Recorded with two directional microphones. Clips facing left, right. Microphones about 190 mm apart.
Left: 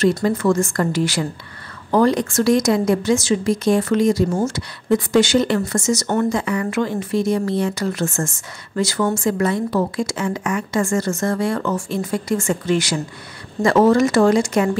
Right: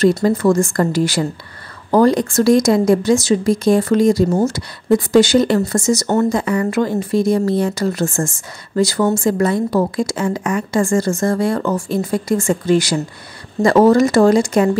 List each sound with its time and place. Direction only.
0.2 s a woman's voice: 35° right (ahead or behind)